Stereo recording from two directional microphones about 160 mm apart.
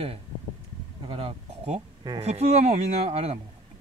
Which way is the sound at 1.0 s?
35° right (ahead or behind).